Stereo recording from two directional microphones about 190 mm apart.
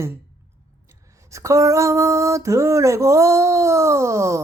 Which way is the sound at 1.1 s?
15° right (ahead or behind).